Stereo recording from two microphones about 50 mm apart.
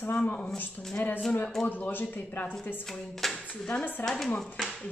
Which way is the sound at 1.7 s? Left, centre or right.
Left.